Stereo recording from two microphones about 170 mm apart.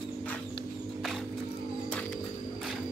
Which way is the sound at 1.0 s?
Centre (ahead or behind).